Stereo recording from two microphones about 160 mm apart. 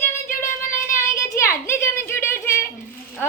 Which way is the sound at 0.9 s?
20° left (ahead or behind).